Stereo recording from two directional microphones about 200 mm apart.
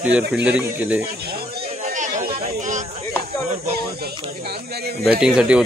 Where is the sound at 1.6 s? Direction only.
35° right (ahead or behind).